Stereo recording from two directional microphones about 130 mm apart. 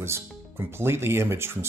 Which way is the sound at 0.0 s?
20° right (ahead or behind).